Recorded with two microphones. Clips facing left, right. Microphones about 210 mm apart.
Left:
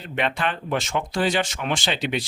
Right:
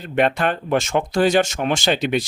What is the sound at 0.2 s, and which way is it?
Speech, 45° right (ahead or behind).